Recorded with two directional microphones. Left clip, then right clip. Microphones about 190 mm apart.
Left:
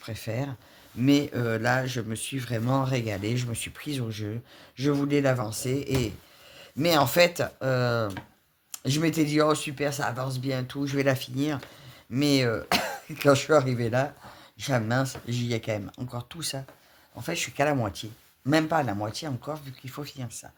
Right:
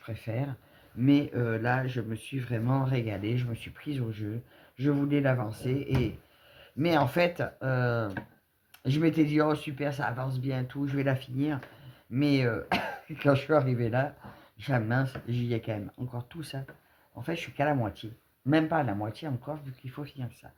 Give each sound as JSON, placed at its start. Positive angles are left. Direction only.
{"t": 0.0, "sound": "speech", "side_deg": 35}